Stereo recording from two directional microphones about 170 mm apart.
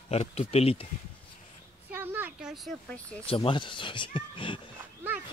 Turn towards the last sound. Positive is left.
turn(degrees=-10)  # may be behind; listen again after turning